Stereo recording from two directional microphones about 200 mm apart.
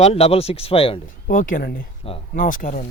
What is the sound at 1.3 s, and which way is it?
Speech, 40° left (ahead or behind).